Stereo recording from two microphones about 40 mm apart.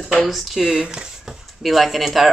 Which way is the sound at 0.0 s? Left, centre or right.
Centre.